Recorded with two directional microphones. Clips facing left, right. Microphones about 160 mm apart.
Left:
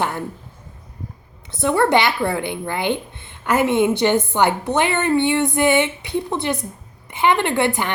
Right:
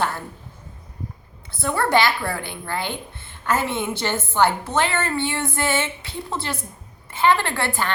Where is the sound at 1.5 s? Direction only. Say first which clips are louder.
Left 6 dB; 20° left (ahead or behind).